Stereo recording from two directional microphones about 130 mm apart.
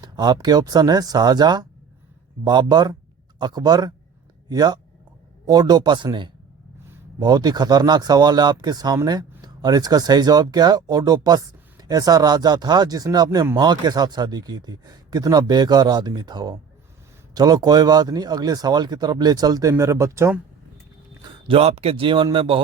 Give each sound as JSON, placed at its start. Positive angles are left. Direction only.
{"t": 0.0, "sound": "speech", "side_deg": -30}
{"t": 21.4, "sound": "speech", "side_deg": -50}